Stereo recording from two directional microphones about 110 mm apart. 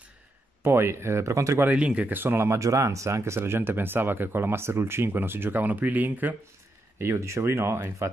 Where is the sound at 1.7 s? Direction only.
10° right (ahead or behind).